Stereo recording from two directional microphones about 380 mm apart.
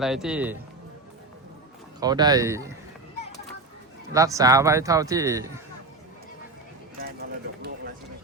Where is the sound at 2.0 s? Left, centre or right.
Centre.